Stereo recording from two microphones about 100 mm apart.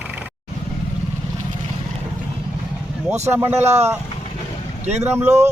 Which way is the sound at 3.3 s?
25° right (ahead or behind).